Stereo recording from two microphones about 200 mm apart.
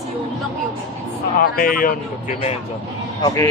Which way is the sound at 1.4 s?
45° left (ahead or behind).